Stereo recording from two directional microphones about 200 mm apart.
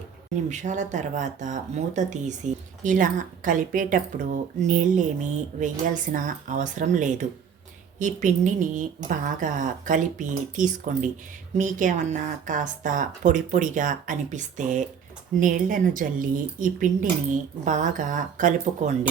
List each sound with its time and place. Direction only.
0.5 s speech: 35° right (ahead or behind)